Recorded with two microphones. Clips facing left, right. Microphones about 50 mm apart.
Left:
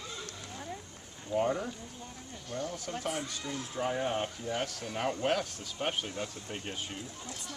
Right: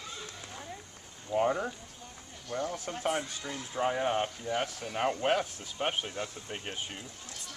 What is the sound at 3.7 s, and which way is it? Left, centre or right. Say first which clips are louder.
Speech: right 3 dB; centre.